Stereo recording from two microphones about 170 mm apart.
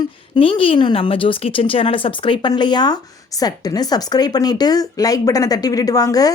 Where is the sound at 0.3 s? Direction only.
30° left (ahead or behind).